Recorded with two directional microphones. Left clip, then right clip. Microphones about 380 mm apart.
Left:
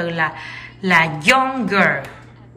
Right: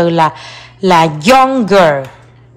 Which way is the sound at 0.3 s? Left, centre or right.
Centre.